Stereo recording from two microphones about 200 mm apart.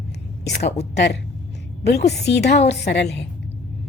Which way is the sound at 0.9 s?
55° left (ahead or behind).